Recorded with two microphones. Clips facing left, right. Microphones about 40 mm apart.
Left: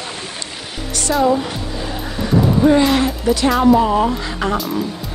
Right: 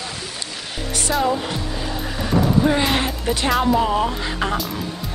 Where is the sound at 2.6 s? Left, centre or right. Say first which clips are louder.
Left 10 dB; centre.